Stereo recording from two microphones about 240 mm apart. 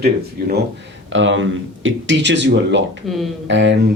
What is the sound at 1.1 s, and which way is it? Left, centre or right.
Speech, right.